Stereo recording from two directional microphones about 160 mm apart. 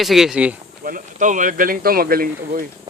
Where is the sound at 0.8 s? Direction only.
55° right (ahead or behind).